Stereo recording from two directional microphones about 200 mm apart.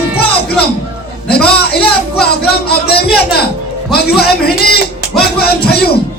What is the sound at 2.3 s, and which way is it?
A man's voice, 50° left (ahead or behind).